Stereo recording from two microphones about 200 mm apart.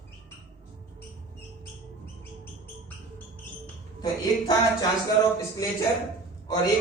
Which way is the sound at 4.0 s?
20° left (ahead or behind).